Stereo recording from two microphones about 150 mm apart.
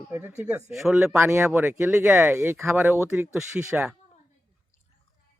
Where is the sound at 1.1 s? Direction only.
15° right (ahead or behind).